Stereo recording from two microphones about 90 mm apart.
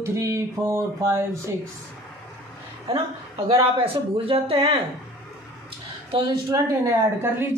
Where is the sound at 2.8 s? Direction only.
90° right.